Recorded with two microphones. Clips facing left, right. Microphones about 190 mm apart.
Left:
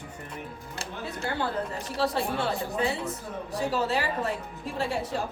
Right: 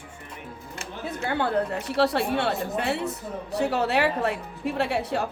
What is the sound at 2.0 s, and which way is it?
A woman's voice, 70° right (ahead or behind).